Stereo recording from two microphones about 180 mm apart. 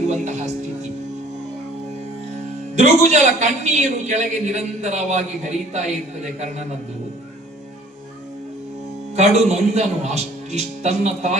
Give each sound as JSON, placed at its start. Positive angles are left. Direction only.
{"t": 0.1, "sound": "a man's voice", "side_deg": -40}
{"t": 2.7, "sound": "a man's voice", "side_deg": -40}
{"t": 9.1, "sound": "a man's voice", "side_deg": -40}